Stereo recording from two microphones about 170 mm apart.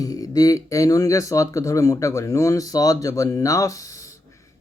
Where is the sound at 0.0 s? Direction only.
20° left (ahead or behind).